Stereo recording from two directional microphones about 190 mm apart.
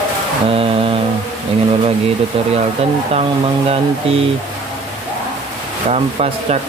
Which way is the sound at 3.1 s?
35° right (ahead or behind).